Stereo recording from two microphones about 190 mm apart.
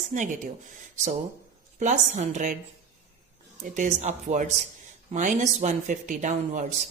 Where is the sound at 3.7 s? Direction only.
40° right (ahead or behind).